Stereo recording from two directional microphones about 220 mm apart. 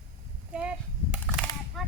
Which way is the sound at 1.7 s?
Centre (ahead or behind).